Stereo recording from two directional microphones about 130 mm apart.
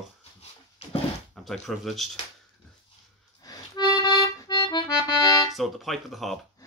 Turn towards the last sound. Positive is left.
turn(degrees=0)  # may be behind; listen again after turning